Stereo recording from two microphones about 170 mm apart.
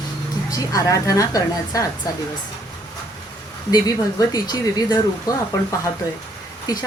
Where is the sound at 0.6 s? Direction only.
20° left (ahead or behind).